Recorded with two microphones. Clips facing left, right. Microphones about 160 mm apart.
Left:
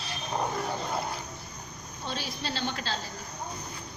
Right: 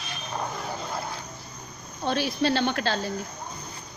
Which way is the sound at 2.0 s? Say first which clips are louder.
Right 11 dB; 65° right (ahead or behind).